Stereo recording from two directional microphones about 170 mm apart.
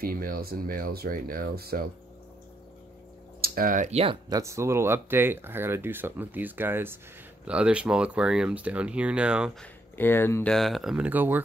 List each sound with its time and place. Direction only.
0.0 s speech: 60° right (ahead or behind)
3.3 s speech: 60° right (ahead or behind); by 4.2 s 35° right (ahead or behind)
4.3 s speech: 15° right (ahead or behind)
9.6 s speech: 10° left (ahead or behind)
10.5 s speech: centre (ahead or behind)